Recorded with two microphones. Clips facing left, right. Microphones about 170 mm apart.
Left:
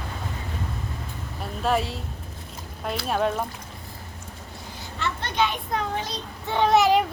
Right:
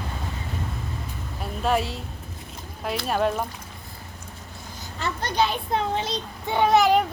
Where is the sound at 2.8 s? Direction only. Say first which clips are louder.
Right 1 dB; centre (ahead or behind).